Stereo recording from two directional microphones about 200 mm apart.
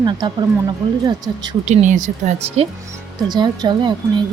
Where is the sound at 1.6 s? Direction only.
35° right (ahead or behind).